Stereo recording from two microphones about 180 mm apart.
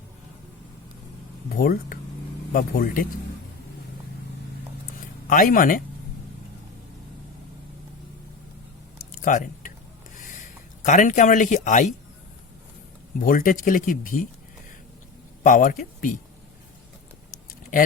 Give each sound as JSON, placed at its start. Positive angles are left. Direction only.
{"t": 1.5, "sound": "speech", "side_deg": 55}
{"t": 5.3, "sound": "speech", "side_deg": 50}
{"t": 9.2, "sound": "a sound", "side_deg": 45}
{"t": 10.8, "sound": "speech", "side_deg": 45}
{"t": 13.1, "sound": "speech", "side_deg": 50}
{"t": 15.4, "sound": "speech", "side_deg": 50}